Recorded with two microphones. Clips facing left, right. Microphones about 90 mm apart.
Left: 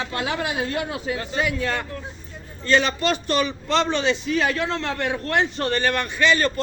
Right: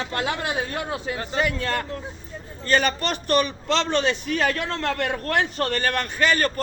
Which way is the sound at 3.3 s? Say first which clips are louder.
Right 1 dB; 55° right (ahead or behind).